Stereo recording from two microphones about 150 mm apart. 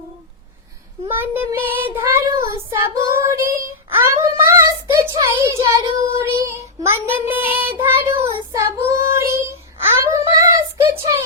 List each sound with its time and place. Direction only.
1.0 s child singing: 15° right (ahead or behind)